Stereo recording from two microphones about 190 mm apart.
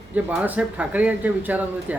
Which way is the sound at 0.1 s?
10° right (ahead or behind).